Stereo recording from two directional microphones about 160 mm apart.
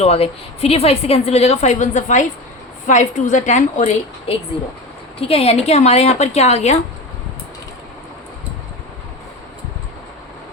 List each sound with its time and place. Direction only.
0.0 s a woman's voice: 40° left (ahead or behind)